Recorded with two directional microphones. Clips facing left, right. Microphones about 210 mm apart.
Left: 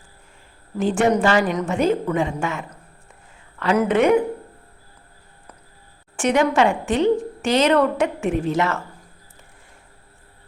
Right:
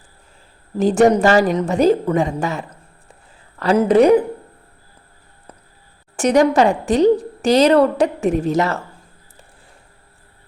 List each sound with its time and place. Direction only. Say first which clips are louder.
0.8 s a woman's voice: right 5 dB; 40° right (ahead or behind)
6.1 s a woman's voice: right 4 dB; 40° right (ahead or behind)